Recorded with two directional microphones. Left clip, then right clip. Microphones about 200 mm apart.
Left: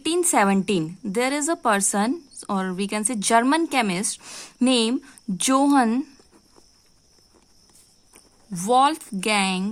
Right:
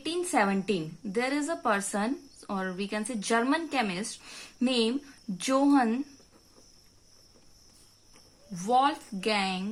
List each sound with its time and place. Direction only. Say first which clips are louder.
0.0 s a woman's voice: left 7 dB; 50° left (ahead or behind)
8.1 s speech: left 7 dB; 50° left (ahead or behind)